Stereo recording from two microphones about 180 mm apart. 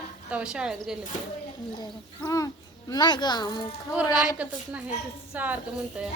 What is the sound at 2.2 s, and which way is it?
A child's voice, 20° left (ahead or behind).